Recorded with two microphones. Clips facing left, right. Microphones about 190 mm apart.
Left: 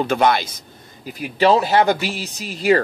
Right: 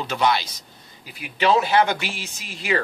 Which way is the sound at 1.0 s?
40° left (ahead or behind).